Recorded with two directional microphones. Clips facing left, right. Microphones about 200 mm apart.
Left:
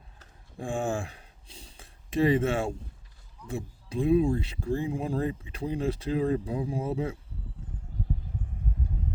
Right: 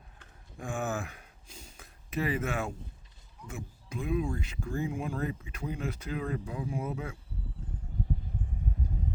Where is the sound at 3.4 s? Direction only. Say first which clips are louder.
Left 7 dB; 30° left (ahead or behind).